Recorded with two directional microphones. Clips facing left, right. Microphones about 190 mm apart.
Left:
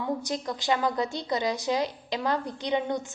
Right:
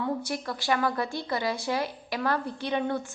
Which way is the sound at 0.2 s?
20° left (ahead or behind).